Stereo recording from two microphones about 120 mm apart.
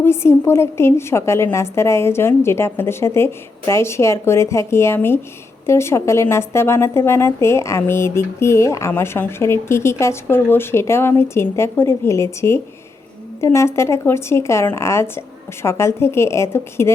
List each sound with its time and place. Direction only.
0.0 s speech: 20° left (ahead or behind)